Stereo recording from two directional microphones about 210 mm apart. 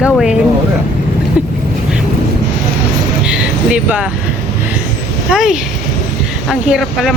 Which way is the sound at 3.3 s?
5° right (ahead or behind).